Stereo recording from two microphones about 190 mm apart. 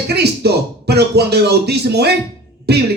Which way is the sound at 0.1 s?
60° right (ahead or behind).